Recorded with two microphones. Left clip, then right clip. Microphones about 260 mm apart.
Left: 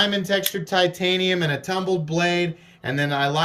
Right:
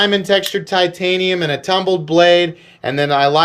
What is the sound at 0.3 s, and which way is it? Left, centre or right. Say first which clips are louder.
Speech: right 8 dB; centre.